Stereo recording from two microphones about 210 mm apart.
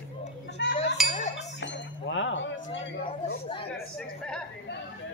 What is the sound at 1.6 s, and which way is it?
Speech, 60° left (ahead or behind).